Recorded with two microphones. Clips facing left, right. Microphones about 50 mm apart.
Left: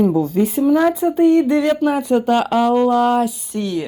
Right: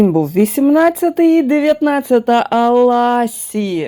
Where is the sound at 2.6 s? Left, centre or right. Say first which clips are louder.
Right 4 dB; right.